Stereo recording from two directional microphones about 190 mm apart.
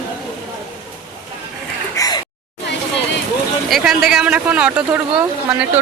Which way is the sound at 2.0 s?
15° left (ahead or behind).